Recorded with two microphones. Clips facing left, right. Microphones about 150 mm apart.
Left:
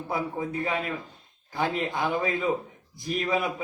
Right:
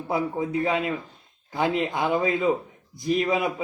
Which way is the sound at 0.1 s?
20° right (ahead or behind).